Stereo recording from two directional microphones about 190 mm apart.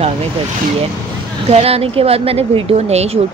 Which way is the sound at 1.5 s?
30° right (ahead or behind).